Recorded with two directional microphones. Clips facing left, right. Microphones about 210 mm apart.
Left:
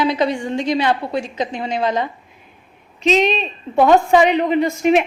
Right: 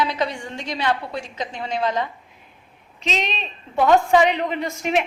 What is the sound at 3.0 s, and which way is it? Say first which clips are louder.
A woman's voice: left 11 dB; 10° left (ahead or behind).